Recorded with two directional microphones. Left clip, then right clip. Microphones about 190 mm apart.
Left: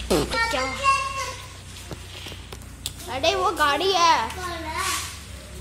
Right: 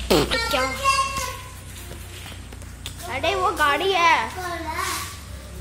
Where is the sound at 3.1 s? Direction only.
25° left (ahead or behind).